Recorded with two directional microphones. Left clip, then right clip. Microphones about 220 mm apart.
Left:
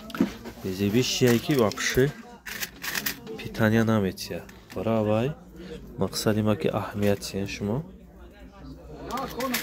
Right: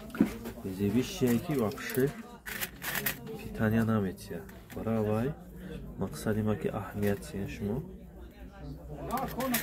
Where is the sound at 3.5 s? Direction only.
40° left (ahead or behind).